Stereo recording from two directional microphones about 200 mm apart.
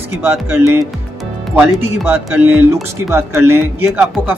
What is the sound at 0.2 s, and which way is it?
Speech, 10° right (ahead or behind).